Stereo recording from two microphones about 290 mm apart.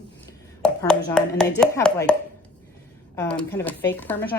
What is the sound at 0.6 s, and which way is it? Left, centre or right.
Speech, centre.